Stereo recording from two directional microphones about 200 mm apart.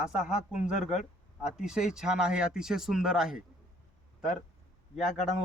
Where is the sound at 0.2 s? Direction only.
35° left (ahead or behind).